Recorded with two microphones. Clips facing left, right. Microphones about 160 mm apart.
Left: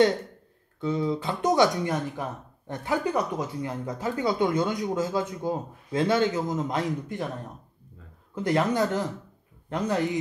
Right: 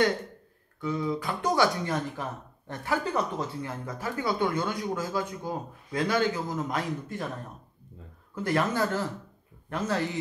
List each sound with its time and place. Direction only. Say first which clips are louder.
0.7 s speech: left 3 dB; 25° left (ahead or behind)
8.4 s speech: left 3 dB; 20° left (ahead or behind)